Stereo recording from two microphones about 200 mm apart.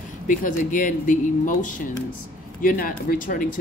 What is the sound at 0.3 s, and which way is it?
Speech, 40° left (ahead or behind).